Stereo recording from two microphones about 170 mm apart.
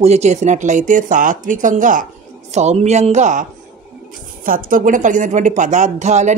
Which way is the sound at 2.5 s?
40° right (ahead or behind).